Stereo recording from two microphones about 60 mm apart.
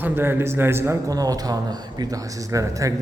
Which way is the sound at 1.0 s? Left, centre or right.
Right.